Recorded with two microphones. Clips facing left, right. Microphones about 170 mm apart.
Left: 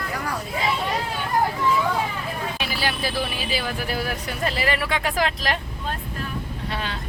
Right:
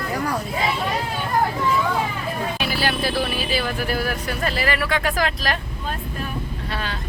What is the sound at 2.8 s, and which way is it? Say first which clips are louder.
Speech: right 3 dB; 15° left (ahead or behind).